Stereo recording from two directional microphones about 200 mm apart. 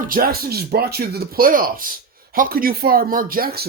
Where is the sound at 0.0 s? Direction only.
45° right (ahead or behind).